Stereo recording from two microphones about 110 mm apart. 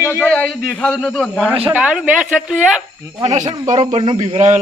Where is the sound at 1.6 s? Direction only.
10° right (ahead or behind).